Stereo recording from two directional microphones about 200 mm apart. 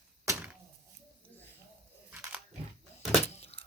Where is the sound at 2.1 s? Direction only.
5° right (ahead or behind).